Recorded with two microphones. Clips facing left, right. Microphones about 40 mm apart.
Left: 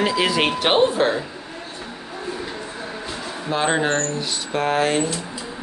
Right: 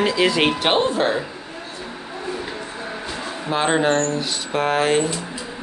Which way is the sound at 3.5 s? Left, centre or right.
Centre.